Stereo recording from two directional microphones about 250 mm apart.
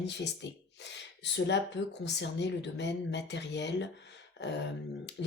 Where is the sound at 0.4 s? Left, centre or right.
Left.